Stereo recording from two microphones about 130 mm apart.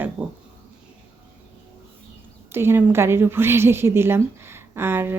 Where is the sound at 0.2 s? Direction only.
10° right (ahead or behind).